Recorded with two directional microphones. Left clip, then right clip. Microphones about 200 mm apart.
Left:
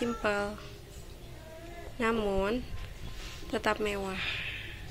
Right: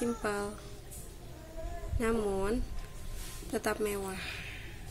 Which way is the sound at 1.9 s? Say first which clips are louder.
Left 2 dB; 5° right (ahead or behind).